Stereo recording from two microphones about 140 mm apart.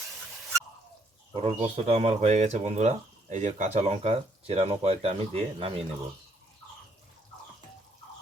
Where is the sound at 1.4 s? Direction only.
45° right (ahead or behind).